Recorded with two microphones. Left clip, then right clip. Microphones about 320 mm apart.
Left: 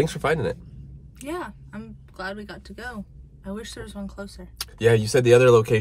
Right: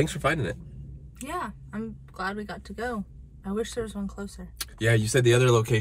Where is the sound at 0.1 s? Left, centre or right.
Centre.